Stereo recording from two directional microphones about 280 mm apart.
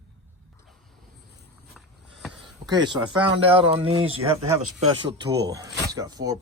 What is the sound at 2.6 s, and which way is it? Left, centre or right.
Speech, centre.